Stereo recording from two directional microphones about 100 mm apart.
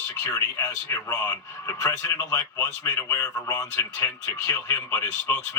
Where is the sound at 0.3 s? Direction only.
25° left (ahead or behind).